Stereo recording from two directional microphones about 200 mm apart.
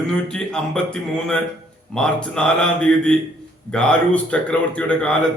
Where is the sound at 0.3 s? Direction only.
5° left (ahead or behind).